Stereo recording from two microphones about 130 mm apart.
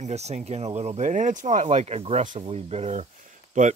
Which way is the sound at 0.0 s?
55° right (ahead or behind).